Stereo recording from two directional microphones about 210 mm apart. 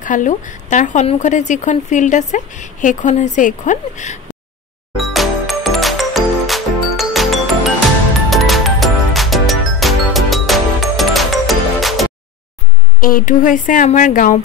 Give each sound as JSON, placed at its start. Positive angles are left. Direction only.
{"t": 0.0, "sound": "speech", "side_deg": 40}
{"t": 4.9, "sound": "music", "side_deg": 0}
{"t": 13.0, "sound": "speech", "side_deg": 40}